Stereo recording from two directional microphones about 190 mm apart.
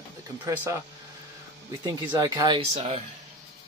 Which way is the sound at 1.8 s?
20° right (ahead or behind).